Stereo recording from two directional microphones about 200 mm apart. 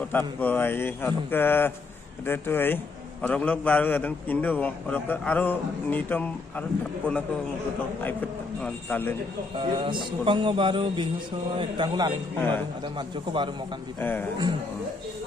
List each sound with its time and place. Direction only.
0.1 s a man's voice: 10° left (ahead or behind)
8.6 s a man's voice: 10° left (ahead or behind)
9.6 s speech: 25° right (ahead or behind)
13.9 s a man's voice: 10° left (ahead or behind)